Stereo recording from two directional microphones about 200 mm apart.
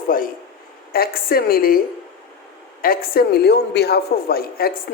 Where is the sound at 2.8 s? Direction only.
45° left (ahead or behind).